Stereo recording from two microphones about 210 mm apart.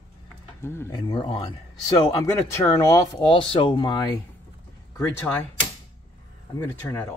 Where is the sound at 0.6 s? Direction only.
10° left (ahead or behind).